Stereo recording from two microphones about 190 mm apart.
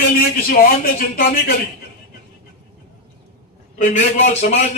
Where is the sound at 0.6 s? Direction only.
50° left (ahead or behind).